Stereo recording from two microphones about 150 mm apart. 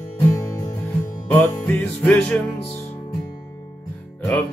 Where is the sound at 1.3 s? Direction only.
10° left (ahead or behind).